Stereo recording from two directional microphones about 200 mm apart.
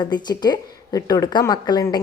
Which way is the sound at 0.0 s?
20° left (ahead or behind).